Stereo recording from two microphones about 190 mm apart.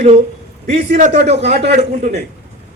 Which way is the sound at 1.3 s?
35° right (ahead or behind).